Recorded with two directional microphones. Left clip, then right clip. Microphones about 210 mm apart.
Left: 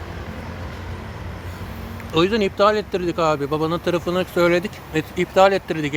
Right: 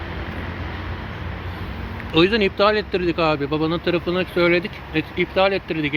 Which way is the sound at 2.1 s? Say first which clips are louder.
Right 2 dB; 15° left (ahead or behind).